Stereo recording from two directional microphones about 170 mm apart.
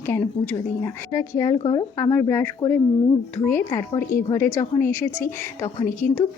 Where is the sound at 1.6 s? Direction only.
30° left (ahead or behind).